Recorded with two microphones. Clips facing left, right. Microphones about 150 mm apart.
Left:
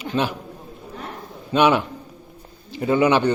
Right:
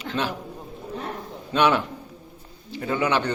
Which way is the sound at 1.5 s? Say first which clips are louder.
Left 3 dB; 10° left (ahead or behind).